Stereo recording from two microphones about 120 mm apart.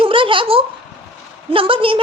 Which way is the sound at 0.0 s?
45° right (ahead or behind).